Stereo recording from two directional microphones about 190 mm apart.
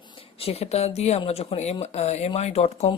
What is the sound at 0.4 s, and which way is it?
Speech, 30° left (ahead or behind).